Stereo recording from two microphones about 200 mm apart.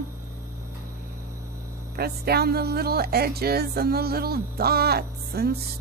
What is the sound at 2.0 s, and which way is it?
Speech, 50° right (ahead or behind).